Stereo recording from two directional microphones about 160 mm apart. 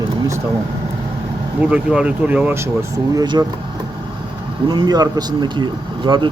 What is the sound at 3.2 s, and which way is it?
Speech, 25° right (ahead or behind).